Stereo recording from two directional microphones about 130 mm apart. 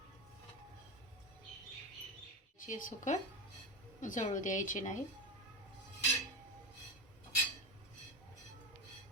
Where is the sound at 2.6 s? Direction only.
75° left (ahead or behind).